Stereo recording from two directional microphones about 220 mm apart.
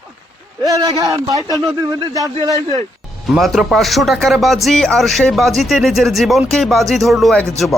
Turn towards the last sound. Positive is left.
turn(degrees=0)  # may be behind; listen again after turning